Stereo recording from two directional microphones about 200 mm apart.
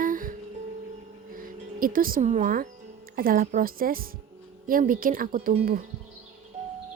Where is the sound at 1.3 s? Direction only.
45° right (ahead or behind).